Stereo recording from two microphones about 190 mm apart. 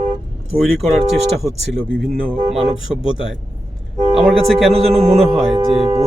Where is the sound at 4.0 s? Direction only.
30° right (ahead or behind).